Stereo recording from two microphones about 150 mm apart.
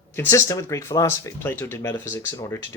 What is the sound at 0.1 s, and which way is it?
Speech, 20° left (ahead or behind).